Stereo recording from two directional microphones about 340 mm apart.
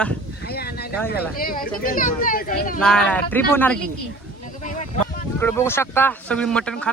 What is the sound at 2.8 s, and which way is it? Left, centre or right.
Speech, centre.